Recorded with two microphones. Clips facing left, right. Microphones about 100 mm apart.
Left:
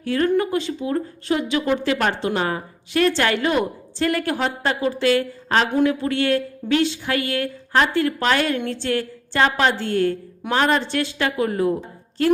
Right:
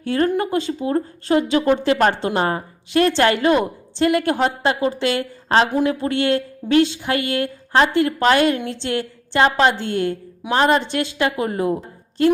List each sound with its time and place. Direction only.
0.0 s a woman's voice: 35° right (ahead or behind)